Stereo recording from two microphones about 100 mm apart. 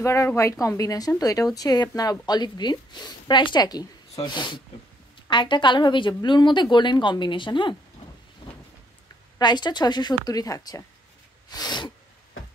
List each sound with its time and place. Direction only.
0.0 s a woman's voice: 30° left (ahead or behind); by 7.7 s 55° left (ahead or behind)
9.4 s a woman's voice: 45° left (ahead or behind)
11.5 s sneeze: 45° left (ahead or behind)